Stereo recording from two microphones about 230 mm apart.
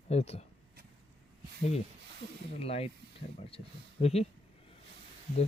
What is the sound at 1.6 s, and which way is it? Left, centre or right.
Speech, left.